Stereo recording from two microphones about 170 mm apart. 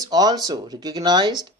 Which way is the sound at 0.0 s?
25° right (ahead or behind).